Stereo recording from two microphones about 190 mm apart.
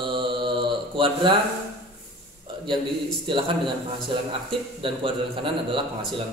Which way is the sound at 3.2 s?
25° right (ahead or behind).